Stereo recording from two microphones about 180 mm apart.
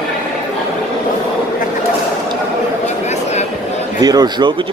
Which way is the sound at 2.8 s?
40° left (ahead or behind).